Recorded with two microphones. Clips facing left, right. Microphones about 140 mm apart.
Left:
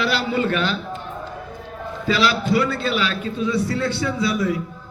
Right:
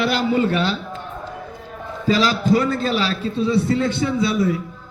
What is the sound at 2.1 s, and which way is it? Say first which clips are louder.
A man's voice: right 2 dB; 40° right (ahead or behind).